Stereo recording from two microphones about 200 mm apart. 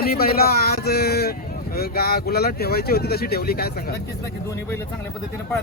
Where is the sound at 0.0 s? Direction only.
50° left (ahead or behind).